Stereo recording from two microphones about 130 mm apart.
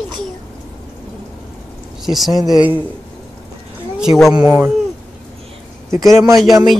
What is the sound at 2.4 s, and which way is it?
Speech, 30° right (ahead or behind).